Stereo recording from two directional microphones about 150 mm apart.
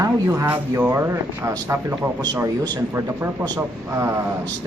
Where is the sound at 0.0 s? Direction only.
20° right (ahead or behind).